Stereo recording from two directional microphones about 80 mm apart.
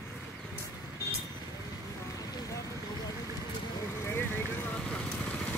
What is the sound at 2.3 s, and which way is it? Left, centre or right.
Vehicle, left.